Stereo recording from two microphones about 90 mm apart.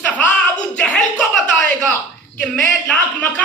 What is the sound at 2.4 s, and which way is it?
Speech, 15° left (ahead or behind).